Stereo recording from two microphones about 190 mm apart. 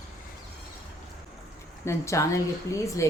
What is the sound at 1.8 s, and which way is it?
Speech, 15° left (ahead or behind).